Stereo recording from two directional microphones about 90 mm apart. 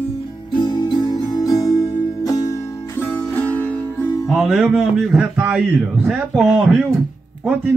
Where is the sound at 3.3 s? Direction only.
20° left (ahead or behind).